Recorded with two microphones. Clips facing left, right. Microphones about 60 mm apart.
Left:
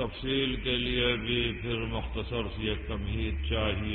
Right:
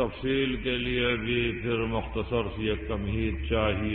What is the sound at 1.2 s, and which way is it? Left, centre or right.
Mantra, right.